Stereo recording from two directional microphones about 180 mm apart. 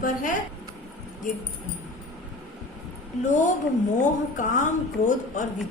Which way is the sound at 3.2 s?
45° left (ahead or behind).